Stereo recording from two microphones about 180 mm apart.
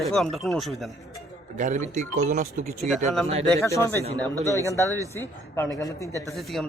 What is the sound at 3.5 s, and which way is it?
Speech, 15° left (ahead or behind).